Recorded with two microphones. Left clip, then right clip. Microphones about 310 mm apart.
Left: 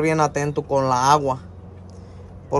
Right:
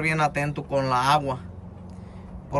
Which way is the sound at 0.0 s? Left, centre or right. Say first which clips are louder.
Left 4 dB; centre.